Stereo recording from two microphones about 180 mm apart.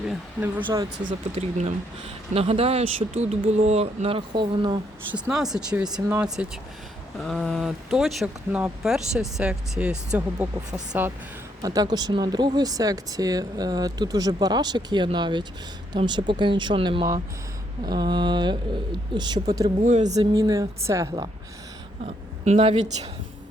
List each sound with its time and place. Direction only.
0.6 s speech: 20° right (ahead or behind)
1.4 s speech: 35° right (ahead or behind)
5.1 s a woman's voice: 5° right (ahead or behind)
11.6 s speech: 20° right (ahead or behind)
19.8 s speech: 40° right (ahead or behind)
20.1 s a woman's voice: 20° right (ahead or behind)
22.0 s a woman's voice: 35° right (ahead or behind)